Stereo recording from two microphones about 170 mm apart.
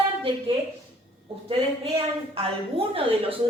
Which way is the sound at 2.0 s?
35° right (ahead or behind).